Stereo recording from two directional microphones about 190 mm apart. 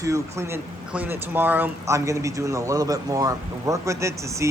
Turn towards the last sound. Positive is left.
turn(degrees=-15)  # may be behind; listen again after turning